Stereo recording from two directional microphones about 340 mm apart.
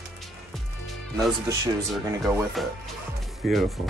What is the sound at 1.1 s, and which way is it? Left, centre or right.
Speech, centre.